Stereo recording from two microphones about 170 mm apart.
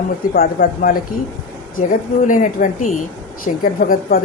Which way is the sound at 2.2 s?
50° left (ahead or behind).